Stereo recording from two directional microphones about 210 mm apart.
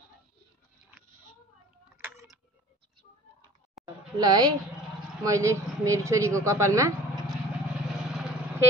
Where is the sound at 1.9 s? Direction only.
10° right (ahead or behind).